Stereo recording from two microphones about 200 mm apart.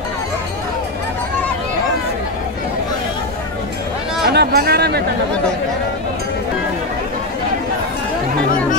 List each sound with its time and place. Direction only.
4.3 s speech: 55° right (ahead or behind)